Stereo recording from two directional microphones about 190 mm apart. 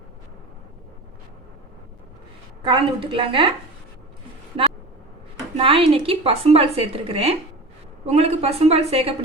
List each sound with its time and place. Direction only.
2.6 s a woman's voice: 25° right (ahead or behind)
5.5 s a woman's voice: 30° right (ahead or behind)